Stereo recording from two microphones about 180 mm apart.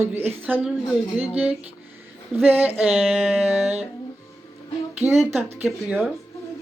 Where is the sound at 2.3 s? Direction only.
10° right (ahead or behind).